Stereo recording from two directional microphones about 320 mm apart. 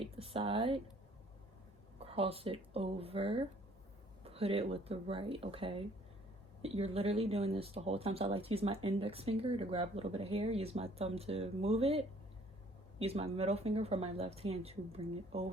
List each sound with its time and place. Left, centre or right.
0.0 s speech: centre
2.0 s speech: centre